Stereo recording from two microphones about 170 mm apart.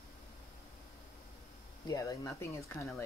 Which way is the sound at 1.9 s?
20° left (ahead or behind).